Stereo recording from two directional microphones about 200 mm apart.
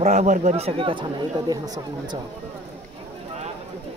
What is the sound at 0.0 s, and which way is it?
Speech, 35° right (ahead or behind).